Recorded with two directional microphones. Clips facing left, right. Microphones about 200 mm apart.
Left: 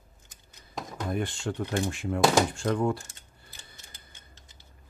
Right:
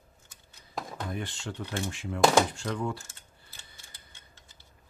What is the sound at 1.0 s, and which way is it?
Speech, 50° left (ahead or behind).